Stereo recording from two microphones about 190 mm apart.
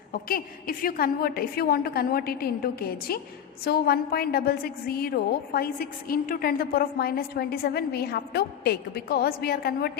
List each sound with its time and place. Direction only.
0.1 s a woman's voice: 50° left (ahead or behind)